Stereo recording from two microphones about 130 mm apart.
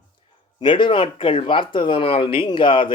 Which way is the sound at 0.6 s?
40° left (ahead or behind).